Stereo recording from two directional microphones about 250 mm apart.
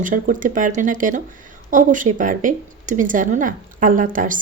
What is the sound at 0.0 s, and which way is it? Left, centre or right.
Speech, right.